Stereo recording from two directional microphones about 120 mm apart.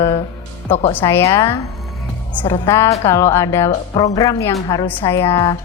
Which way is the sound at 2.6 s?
25° left (ahead or behind).